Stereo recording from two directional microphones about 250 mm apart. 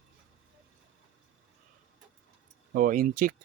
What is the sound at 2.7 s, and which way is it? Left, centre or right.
Speech, right.